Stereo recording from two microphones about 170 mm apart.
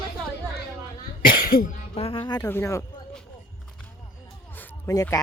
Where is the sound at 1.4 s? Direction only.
55° left (ahead or behind).